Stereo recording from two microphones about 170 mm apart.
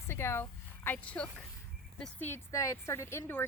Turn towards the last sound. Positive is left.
turn(degrees=15)  # may be behind; listen again after turning